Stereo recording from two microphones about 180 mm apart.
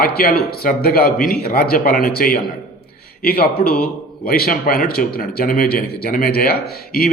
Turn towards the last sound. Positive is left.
turn(degrees=55)  # may be behind; listen again after turning